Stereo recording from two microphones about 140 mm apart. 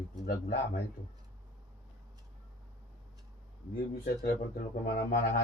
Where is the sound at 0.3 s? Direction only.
90° left.